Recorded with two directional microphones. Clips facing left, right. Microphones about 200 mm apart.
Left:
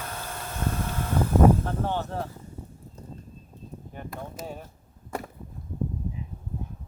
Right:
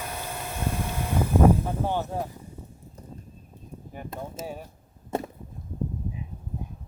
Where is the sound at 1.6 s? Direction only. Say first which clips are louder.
Right 1 dB; 10° right (ahead or behind).